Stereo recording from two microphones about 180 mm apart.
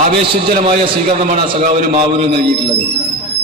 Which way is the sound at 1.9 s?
35° right (ahead or behind).